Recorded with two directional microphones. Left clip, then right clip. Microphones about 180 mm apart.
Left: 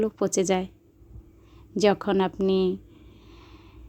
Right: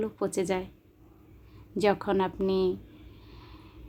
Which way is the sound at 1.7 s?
30° left (ahead or behind).